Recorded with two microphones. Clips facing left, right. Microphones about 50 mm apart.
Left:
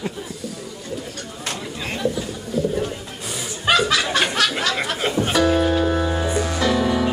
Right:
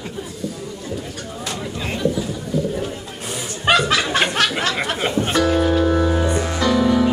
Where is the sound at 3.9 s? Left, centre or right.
Right.